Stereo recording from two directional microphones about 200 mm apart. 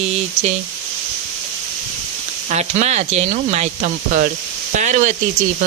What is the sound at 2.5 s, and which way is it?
Speech, 35° right (ahead or behind).